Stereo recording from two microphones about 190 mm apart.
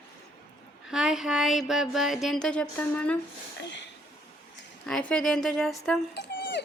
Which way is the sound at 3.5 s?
65° left (ahead or behind).